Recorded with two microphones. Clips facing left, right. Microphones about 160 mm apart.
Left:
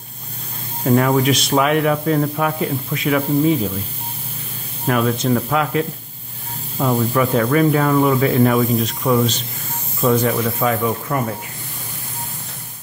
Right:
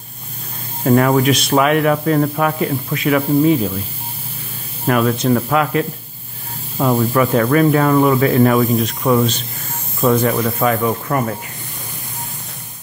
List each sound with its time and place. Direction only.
0.8 s speech: 60° right (ahead or behind)
4.8 s speech: 60° right (ahead or behind)